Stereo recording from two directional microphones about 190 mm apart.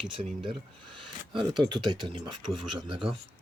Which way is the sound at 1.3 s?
25° right (ahead or behind).